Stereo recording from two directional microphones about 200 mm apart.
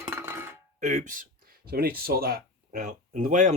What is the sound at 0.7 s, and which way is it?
Speech, 35° right (ahead or behind).